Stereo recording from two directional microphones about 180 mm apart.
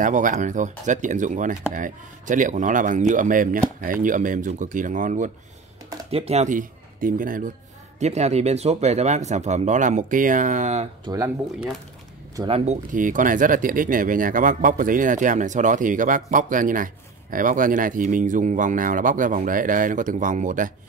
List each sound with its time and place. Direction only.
0.0 s speech: 45° right (ahead or behind)
6.1 s speech: 35° right (ahead or behind)
8.0 s speech: 40° right (ahead or behind)
11.1 s speech: 15° right (ahead or behind)
12.4 s speech: 35° right (ahead or behind)
12.9 s speech: 45° right (ahead or behind)